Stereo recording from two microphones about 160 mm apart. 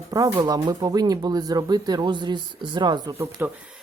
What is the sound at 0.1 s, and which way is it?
Speech, 25° right (ahead or behind).